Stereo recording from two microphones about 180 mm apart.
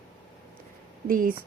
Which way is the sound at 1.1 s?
50° right (ahead or behind).